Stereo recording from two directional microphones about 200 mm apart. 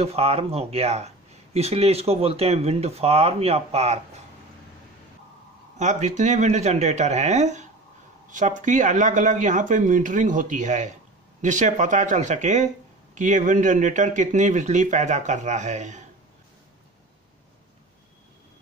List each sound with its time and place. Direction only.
0.0 s speech: 30° right (ahead or behind)
5.8 s speech: 35° right (ahead or behind)